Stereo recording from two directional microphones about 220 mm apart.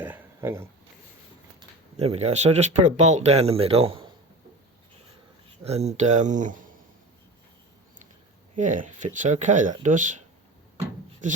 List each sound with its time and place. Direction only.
0.0 s a sound: 10° right (ahead or behind)
2.0 s speech: 30° right (ahead or behind)
5.6 s speech: 30° right (ahead or behind)
8.5 s speech: 35° right (ahead or behind)